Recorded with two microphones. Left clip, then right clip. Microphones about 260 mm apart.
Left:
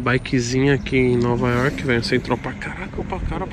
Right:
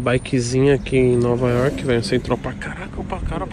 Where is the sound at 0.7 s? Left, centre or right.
Left.